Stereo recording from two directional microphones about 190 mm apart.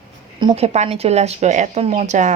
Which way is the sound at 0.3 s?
30° right (ahead or behind).